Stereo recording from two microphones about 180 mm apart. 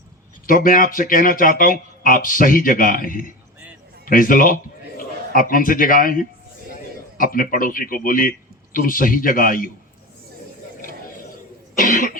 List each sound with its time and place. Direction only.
0.4 s a man's voice: 50° left (ahead or behind)
11.8 s speech: 50° left (ahead or behind)